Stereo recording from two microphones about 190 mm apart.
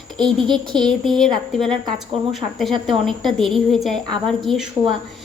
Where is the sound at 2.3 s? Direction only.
Centre (ahead or behind).